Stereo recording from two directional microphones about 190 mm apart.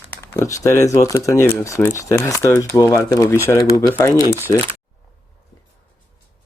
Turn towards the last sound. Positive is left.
turn(degrees=10)  # may be behind; listen again after turning